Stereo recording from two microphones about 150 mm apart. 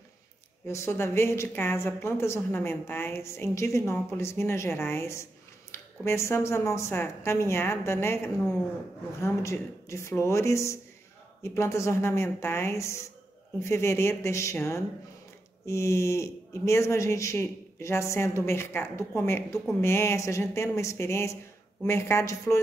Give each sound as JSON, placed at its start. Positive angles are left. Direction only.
{"t": 0.7, "sound": "a woman's voice", "side_deg": 20}